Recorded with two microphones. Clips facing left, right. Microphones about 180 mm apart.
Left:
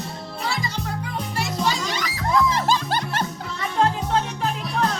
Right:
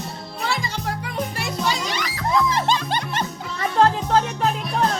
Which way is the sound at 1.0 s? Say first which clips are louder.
Right 1 dB; 60° right (ahead or behind).